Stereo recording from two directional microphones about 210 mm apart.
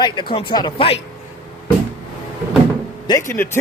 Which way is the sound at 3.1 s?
15° left (ahead or behind).